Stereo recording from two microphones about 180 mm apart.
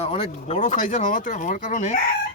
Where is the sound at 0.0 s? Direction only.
35° left (ahead or behind).